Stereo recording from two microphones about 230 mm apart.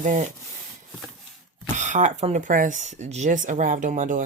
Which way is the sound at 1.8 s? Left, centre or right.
Right.